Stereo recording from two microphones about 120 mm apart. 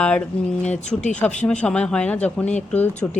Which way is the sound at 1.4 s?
10° left (ahead or behind).